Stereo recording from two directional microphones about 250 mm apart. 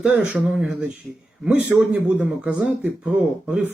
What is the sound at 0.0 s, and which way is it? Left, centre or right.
A man's voice, centre.